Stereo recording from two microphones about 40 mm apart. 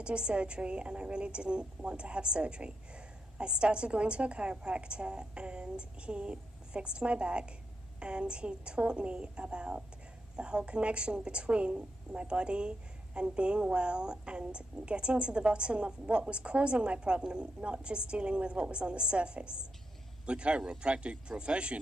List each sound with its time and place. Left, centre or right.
0.0 s a woman's voice: right